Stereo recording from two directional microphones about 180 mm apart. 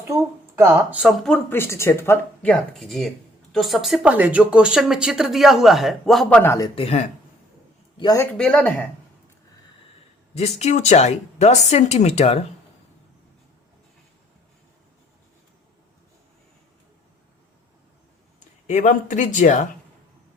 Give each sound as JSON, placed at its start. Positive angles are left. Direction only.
{"t": 0.2, "sound": "speech", "side_deg": -10}
{"t": 6.4, "sound": "speech", "side_deg": 15}
{"t": 6.7, "sound": "speech", "side_deg": 35}
{"t": 7.9, "sound": "speech", "side_deg": 20}
{"t": 10.6, "sound": "speech", "side_deg": 40}
{"t": 18.3, "sound": "speech", "side_deg": 40}